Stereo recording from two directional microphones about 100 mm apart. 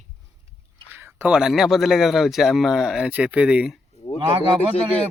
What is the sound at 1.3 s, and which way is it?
Speech, 5° right (ahead or behind).